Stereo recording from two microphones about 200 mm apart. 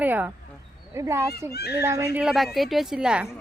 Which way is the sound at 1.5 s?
55° left (ahead or behind).